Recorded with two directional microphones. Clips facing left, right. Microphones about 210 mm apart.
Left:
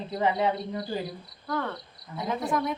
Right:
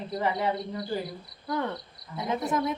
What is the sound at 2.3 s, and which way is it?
Speech, 20° right (ahead or behind).